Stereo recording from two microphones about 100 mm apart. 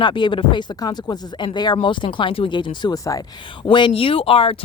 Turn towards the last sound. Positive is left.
turn(degrees=65)  # may be behind; listen again after turning